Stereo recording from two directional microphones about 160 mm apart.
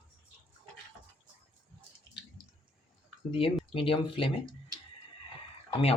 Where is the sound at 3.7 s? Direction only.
35° left (ahead or behind).